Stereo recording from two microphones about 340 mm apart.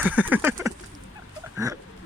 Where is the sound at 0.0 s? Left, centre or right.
Centre.